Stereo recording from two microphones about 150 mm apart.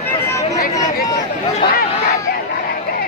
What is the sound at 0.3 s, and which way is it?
Chatter, 20° left (ahead or behind).